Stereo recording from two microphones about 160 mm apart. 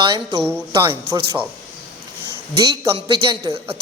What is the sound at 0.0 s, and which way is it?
A man's voice, 25° right (ahead or behind).